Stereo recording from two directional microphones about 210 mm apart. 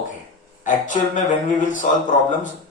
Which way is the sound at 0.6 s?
35° left (ahead or behind).